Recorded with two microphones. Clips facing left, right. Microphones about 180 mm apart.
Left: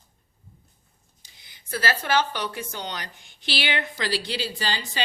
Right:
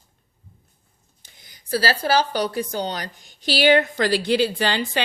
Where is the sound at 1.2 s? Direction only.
45° right (ahead or behind).